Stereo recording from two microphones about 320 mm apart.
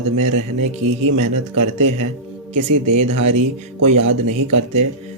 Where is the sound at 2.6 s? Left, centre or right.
Right.